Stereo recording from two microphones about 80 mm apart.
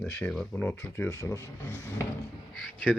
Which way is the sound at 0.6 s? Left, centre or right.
Left.